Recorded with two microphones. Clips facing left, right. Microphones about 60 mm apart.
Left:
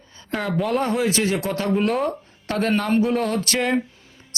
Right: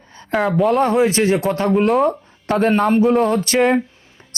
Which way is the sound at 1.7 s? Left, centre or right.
Centre.